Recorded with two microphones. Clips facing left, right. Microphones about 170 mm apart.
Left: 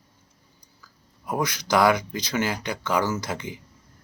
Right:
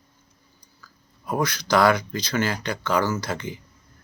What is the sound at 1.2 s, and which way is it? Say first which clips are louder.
Speech: right 2 dB; 15° left (ahead or behind).